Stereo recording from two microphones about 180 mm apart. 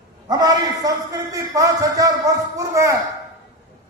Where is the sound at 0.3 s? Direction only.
20° right (ahead or behind).